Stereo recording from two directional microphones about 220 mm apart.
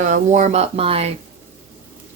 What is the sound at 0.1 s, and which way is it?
Speech, 35° right (ahead or behind).